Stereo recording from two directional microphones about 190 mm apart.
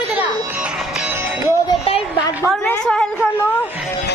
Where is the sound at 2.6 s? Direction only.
5° left (ahead or behind).